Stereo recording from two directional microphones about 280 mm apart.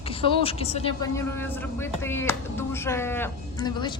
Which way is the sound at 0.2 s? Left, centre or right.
Centre.